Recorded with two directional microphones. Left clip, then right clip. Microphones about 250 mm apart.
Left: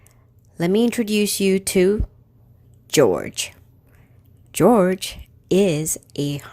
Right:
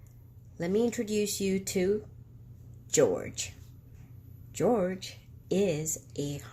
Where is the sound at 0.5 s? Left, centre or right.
Left.